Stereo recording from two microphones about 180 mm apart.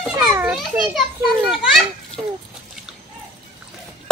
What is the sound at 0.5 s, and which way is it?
Children playing, centre (ahead or behind).